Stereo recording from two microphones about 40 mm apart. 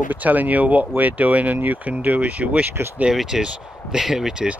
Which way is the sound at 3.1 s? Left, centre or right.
Centre.